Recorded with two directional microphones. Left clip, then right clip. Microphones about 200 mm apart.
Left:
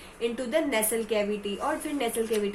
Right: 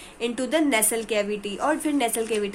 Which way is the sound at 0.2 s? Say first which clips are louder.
Right 3 dB; 50° right (ahead or behind).